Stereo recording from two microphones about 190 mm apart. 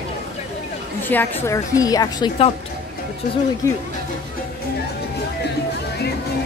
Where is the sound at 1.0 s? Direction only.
10° left (ahead or behind); by 2.5 s 25° left (ahead or behind).